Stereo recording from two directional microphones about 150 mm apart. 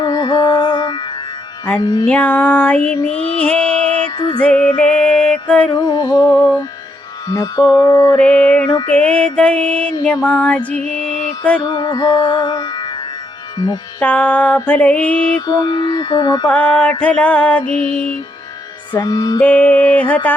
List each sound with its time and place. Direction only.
0.0 s music: 25° left (ahead or behind)
2.0 s female singing: 10° left (ahead or behind)
4.4 s music: 10° left (ahead or behind)
5.7 s music: 25° left (ahead or behind)
8.1 s female singing: 10° left (ahead or behind)
11.6 s music: 30° left (ahead or behind)
14.0 s female singing: 10° left (ahead or behind)
15.4 s music: 25° left (ahead or behind)
16.5 s female singing: 10° left (ahead or behind)
18.9 s music: 25° left (ahead or behind)
19.4 s female singing: 10° left (ahead or behind)